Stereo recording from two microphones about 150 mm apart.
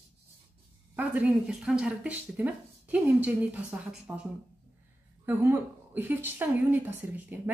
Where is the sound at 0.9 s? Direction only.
10° right (ahead or behind).